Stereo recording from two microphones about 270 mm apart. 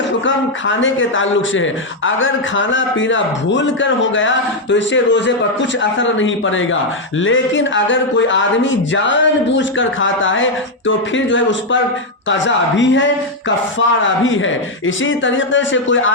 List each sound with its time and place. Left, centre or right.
0.6 s speech: left